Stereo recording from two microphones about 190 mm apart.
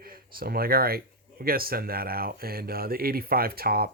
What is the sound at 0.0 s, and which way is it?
Speech, 50° right (ahead or behind).